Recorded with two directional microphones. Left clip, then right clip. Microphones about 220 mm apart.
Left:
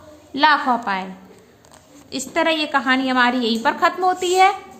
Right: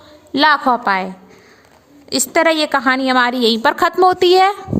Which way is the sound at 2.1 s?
50° right (ahead or behind).